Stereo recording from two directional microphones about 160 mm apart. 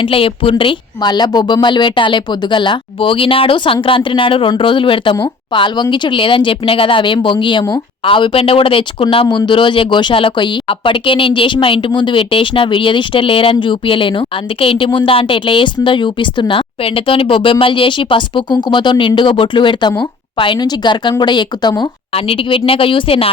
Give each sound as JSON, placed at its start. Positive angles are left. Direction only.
{"t": 0.0, "sound": "speech", "side_deg": 35}